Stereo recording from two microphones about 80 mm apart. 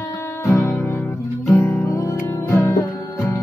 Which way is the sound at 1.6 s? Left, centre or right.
Left.